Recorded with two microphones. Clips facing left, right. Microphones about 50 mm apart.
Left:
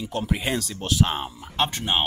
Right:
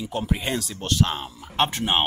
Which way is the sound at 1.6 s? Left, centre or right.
Centre.